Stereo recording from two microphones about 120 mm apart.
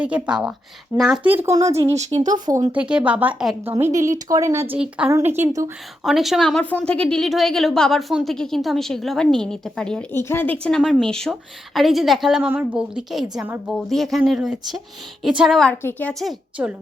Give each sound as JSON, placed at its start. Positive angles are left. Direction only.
{"t": 0.0, "sound": "a woman's voice", "side_deg": -10}
{"t": 1.5, "sound": "speech", "side_deg": -25}
{"t": 2.1, "sound": "speech", "side_deg": -90}
{"t": 2.9, "sound": "a woman's voice", "side_deg": -10}
{"t": 4.7, "sound": "a woman's voice", "side_deg": -10}
{"t": 6.0, "sound": "a woman's voice", "side_deg": 0}
{"t": 6.6, "sound": "a woman's voice", "side_deg": 10}
{"t": 10.1, "sound": "a woman's voice", "side_deg": 20}
{"t": 12.5, "sound": "a woman's voice", "side_deg": -10}
{"t": 15.8, "sound": "a woman's voice", "side_deg": 15}
{"t": 16.6, "sound": "a woman's voice", "side_deg": -10}